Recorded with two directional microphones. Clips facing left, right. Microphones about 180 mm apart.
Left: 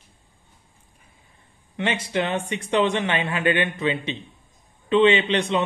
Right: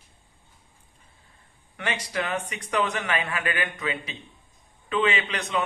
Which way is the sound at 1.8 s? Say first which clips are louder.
Left 5 dB; 25° left (ahead or behind).